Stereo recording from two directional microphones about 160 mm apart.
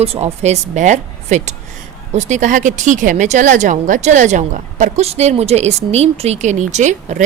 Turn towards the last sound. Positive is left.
turn(degrees=-50)  # may be behind; listen again after turning